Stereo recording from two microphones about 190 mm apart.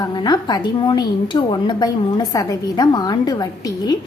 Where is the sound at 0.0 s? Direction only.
25° left (ahead or behind).